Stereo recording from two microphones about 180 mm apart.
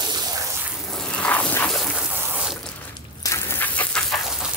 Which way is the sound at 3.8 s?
5° left (ahead or behind).